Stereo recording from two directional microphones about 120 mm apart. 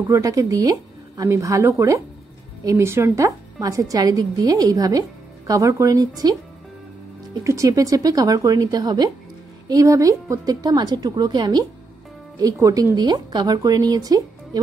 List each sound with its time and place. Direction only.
0.1 s a woman's voice: 30° right (ahead or behind)
7.4 s speech: 30° right (ahead or behind)